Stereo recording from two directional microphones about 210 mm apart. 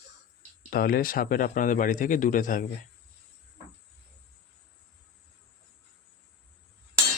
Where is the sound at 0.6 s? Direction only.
45° left (ahead or behind).